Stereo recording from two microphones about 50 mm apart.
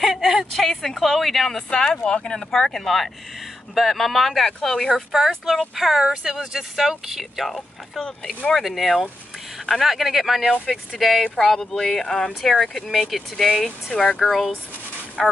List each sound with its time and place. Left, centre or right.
0.0 s a sound: centre
0.5 s speech: centre
2.0 s speech: centre
5.8 s speech: centre
7.4 s speech: centre
11.3 s speech: centre